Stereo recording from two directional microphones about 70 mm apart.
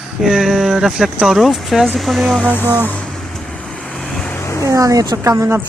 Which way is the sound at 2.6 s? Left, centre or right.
Right.